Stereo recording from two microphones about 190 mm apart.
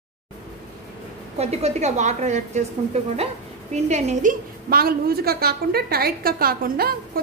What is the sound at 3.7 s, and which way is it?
A woman's voice, 35° right (ahead or behind).